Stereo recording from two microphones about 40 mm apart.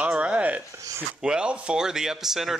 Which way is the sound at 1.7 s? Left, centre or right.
Centre.